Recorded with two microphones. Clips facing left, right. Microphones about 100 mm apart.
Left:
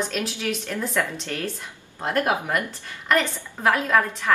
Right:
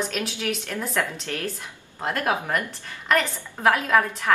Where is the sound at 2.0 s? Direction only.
20° left (ahead or behind).